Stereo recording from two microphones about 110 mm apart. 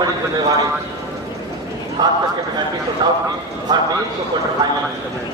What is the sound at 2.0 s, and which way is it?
A man's voice, 35° right (ahead or behind).